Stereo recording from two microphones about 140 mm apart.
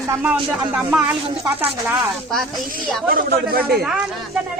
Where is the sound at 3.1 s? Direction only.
90° right.